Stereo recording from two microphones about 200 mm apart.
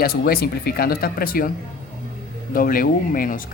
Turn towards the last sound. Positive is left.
turn(degrees=45)  # may be behind; listen again after turning